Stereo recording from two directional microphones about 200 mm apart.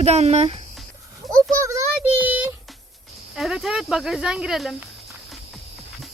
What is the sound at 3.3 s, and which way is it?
Speech, centre (ahead or behind).